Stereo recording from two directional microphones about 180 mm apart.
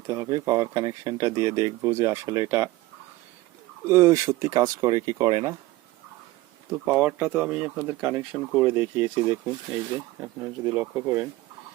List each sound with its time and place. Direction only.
0.1 s speech: 20° right (ahead or behind)
3.8 s speech: 15° right (ahead or behind)
6.7 s speech: 15° right (ahead or behind)